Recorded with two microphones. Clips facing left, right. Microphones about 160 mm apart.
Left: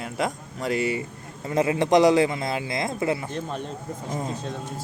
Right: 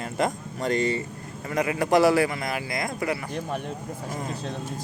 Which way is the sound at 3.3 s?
15° right (ahead or behind).